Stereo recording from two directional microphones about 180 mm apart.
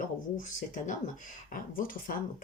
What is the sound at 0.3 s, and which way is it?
Speech, 45° left (ahead or behind).